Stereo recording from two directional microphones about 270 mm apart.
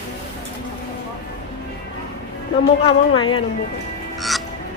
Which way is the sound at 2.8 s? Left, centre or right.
Centre.